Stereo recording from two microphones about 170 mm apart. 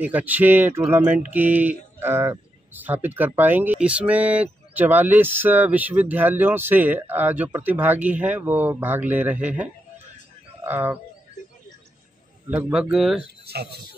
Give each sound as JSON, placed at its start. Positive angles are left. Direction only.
{"t": 0.0, "sound": "speech", "side_deg": -10}
{"t": 12.4, "sound": "a man's voice", "side_deg": -10}
{"t": 13.5, "sound": "speech", "side_deg": -70}